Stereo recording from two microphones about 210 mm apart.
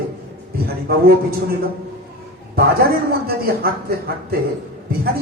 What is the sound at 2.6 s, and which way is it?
A man's voice, 45° right (ahead or behind).